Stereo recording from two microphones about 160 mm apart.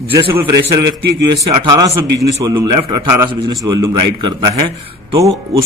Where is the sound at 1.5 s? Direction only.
25° right (ahead or behind).